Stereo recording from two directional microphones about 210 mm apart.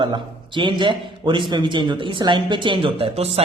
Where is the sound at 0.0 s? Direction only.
25° right (ahead or behind).